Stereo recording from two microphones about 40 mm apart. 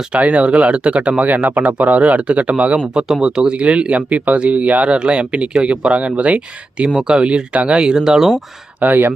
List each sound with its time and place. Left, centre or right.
0.1 s speech: right
3.2 s speech: right
7.8 s speech: centre
8.8 s speech: right